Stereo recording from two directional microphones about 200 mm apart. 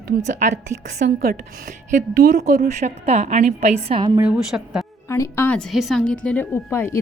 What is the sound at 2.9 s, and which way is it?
A woman's voice, 35° right (ahead or behind).